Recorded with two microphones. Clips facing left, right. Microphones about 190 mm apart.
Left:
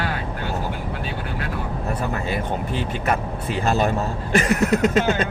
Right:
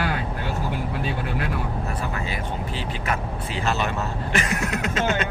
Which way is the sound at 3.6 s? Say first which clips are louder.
Left 5 dB; 45° left (ahead or behind).